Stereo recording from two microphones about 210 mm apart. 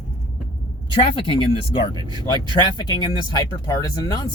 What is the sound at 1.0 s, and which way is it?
Speech, 25° left (ahead or behind).